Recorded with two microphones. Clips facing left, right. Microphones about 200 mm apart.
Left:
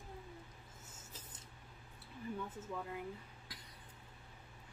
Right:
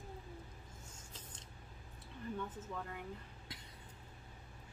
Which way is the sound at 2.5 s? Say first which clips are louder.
Left 1 dB; 10° left (ahead or behind).